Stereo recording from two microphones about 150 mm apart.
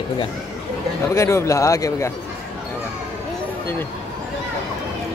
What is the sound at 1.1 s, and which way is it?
Speech, 20° left (ahead or behind).